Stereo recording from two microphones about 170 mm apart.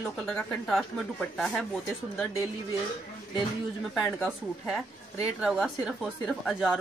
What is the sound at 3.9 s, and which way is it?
Speech, centre (ahead or behind).